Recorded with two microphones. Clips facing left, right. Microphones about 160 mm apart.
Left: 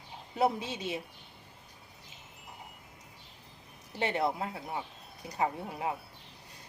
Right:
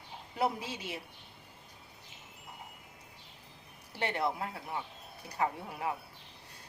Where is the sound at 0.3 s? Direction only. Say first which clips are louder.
Left 4 dB; 25° left (ahead or behind).